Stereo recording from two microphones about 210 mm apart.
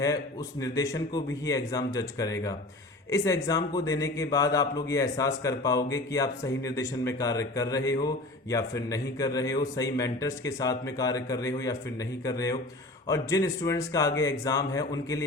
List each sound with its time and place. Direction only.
0.6 s speech: 15° left (ahead or behind)